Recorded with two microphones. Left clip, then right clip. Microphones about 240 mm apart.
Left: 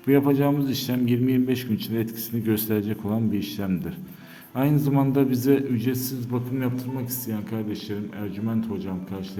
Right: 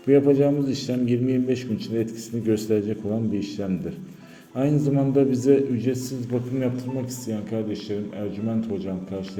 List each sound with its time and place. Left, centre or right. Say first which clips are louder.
0.1 s a man's voice: right 3 dB; left
7.3 s speech: right 3 dB; centre